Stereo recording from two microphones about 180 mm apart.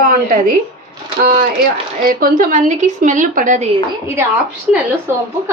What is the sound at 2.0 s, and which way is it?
A woman's voice, 50° right (ahead or behind).